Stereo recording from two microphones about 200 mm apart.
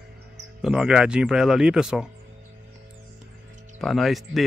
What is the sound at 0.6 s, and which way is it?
Speech, 5° right (ahead or behind).